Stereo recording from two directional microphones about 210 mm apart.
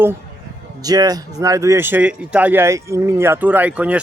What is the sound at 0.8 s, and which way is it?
Speech, 15° right (ahead or behind).